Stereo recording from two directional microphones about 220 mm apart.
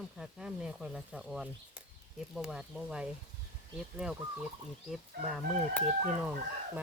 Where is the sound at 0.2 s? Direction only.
5° right (ahead or behind).